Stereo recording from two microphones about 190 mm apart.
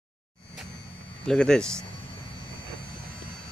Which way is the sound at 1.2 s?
5° left (ahead or behind).